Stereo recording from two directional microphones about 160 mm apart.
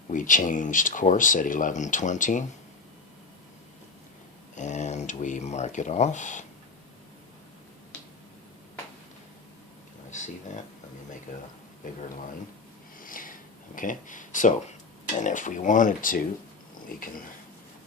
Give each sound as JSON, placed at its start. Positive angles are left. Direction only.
{"t": 0.1, "sound": "speech", "side_deg": 55}
{"t": 4.5, "sound": "speech", "side_deg": 45}
{"t": 11.8, "sound": "speech", "side_deg": 55}
{"t": 13.0, "sound": "sniff", "side_deg": 60}
{"t": 13.7, "sound": "speech", "side_deg": 55}
{"t": 16.9, "sound": "a sound", "side_deg": 65}